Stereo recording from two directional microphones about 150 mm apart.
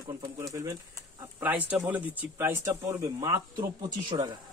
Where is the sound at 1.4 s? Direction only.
10° right (ahead or behind); by 4.3 s 30° right (ahead or behind).